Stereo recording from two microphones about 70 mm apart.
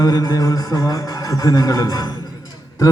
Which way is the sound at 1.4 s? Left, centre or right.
Left.